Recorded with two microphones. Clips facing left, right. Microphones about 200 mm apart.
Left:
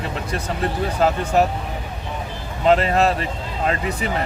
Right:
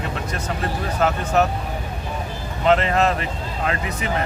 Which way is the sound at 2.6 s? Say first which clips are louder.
Left 1 dB; 35° left (ahead or behind).